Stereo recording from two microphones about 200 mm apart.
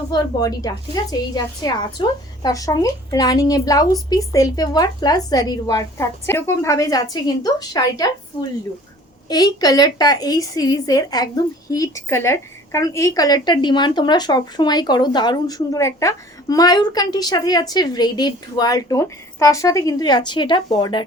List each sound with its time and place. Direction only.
0.1 s speech: 20° left (ahead or behind)